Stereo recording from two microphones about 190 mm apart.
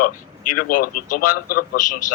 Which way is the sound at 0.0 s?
45° left (ahead or behind).